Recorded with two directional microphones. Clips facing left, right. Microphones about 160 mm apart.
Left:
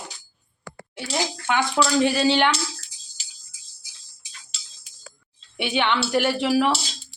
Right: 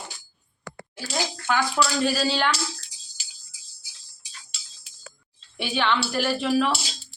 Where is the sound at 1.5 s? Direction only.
20° left (ahead or behind).